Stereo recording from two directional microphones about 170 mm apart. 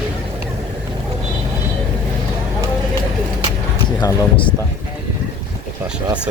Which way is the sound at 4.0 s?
25° left (ahead or behind).